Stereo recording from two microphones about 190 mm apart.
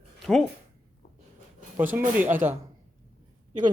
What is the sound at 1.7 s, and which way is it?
Speech, 10° right (ahead or behind).